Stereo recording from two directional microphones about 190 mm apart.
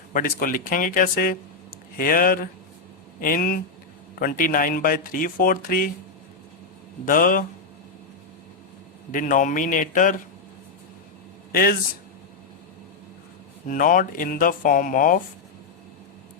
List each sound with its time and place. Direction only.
0.1 s speech: 45° left (ahead or behind)
7.0 s speech: 45° left (ahead or behind)
9.1 s speech: 40° left (ahead or behind)
11.5 s speech: 50° left (ahead or behind)
13.7 s speech: 45° left (ahead or behind)